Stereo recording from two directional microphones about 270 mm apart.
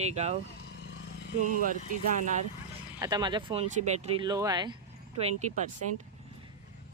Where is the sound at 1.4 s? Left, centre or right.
Right.